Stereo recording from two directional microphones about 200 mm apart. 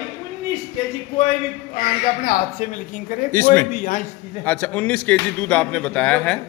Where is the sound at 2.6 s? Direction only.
40° left (ahead or behind).